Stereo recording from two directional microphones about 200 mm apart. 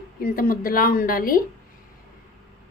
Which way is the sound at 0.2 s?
45° left (ahead or behind).